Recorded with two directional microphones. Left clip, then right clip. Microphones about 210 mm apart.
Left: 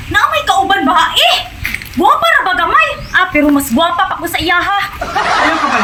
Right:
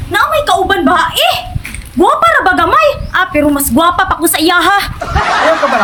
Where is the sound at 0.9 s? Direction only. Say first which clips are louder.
Left 1 dB; 20° right (ahead or behind).